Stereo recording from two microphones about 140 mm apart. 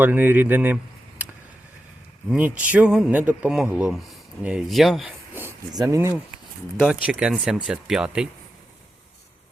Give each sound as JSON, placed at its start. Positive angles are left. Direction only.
{"t": 0.0, "sound": "a man's voice", "side_deg": -15}
{"t": 1.2, "sound": "a sound", "side_deg": -10}
{"t": 2.3, "sound": "a man's voice", "side_deg": -10}
{"t": 5.7, "sound": "speech", "side_deg": -25}
{"t": 6.8, "sound": "speech", "side_deg": -5}